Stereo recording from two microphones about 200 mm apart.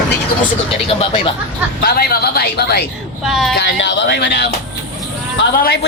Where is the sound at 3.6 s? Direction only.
60° left (ahead or behind).